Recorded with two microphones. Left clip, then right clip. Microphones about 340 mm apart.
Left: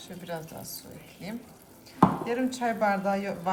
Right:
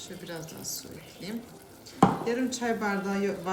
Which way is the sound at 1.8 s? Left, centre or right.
Left.